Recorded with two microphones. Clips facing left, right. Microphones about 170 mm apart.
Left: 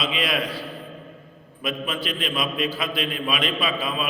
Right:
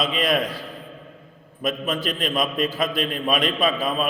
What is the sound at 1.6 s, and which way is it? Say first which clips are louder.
A man's voice: right 3 dB; 45° right (ahead or behind).